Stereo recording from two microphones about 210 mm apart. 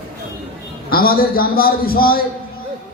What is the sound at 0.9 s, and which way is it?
Speech, 45° left (ahead or behind).